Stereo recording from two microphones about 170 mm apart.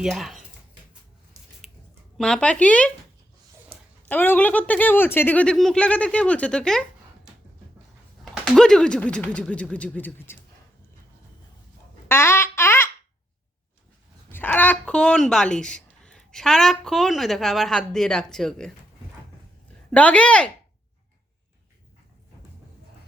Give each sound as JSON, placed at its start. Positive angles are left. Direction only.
{"t": 0.0, "sound": "speech", "side_deg": 0}
{"t": 1.6, "sound": "a sound", "side_deg": 0}
{"t": 2.1, "sound": "speech", "side_deg": 5}
{"t": 8.2, "sound": "speech", "side_deg": 5}
{"t": 12.0, "sound": "a sound", "side_deg": 15}
{"t": 14.3, "sound": "speech", "side_deg": 10}
{"t": 19.9, "sound": "speech", "side_deg": 10}